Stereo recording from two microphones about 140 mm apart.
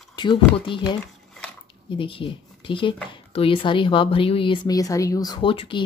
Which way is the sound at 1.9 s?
40° left (ahead or behind).